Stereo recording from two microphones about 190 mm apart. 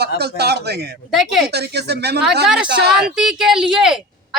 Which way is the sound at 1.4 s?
60° right (ahead or behind).